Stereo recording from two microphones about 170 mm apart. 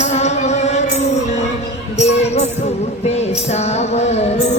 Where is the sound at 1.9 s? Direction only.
40° left (ahead or behind).